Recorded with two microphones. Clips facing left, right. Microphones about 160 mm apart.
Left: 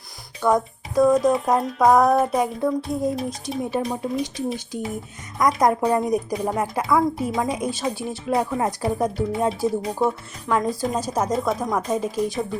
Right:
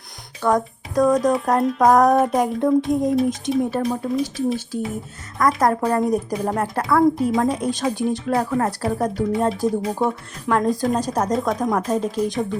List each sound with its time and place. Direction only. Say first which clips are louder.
0.4 s speech: even; 10° left (ahead or behind)
5.4 s a woman's voice: right 1 dB; 15° left (ahead or behind)
5.8 s speech: right 1 dB; centre (ahead or behind)
6.6 s a woman's voice: right 3 dB; 10° left (ahead or behind)